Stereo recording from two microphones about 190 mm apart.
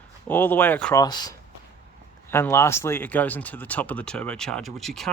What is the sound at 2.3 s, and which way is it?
Speech, 15° left (ahead or behind).